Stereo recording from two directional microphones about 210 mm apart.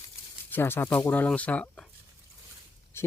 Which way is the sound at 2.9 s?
10° left (ahead or behind).